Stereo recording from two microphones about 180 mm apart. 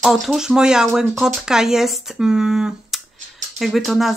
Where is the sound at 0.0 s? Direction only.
Centre (ahead or behind).